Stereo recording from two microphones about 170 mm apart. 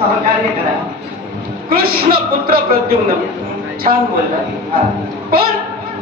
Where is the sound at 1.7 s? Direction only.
60° right (ahead or behind).